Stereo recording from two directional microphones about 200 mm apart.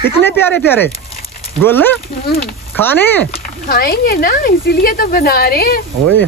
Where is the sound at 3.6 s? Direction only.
50° left (ahead or behind).